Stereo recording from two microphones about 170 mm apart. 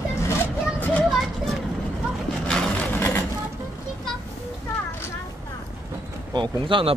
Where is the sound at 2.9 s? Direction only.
15° left (ahead or behind).